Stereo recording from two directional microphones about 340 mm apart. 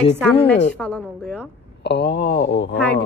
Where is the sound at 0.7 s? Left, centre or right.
Centre.